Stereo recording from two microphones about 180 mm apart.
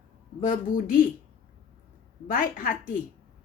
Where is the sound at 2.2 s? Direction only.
50° left (ahead or behind).